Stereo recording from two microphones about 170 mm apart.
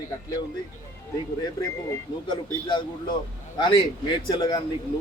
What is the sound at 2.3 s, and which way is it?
Speech, 30° left (ahead or behind).